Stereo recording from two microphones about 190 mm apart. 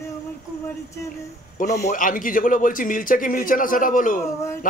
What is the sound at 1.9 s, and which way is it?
A man's voice, 45° left (ahead or behind).